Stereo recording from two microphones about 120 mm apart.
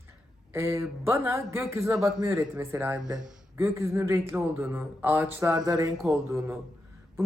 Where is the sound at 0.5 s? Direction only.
25° right (ahead or behind).